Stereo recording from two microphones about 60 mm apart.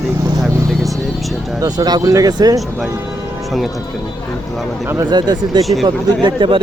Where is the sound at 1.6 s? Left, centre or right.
Right.